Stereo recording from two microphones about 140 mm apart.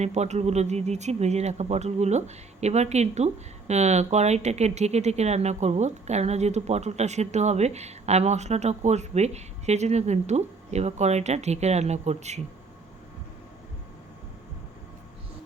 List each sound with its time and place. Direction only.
0.0 s speech: 55° right (ahead or behind)